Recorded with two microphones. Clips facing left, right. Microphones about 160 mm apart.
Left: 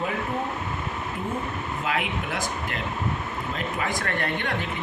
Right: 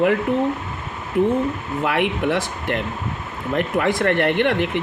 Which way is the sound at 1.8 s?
65° right (ahead or behind).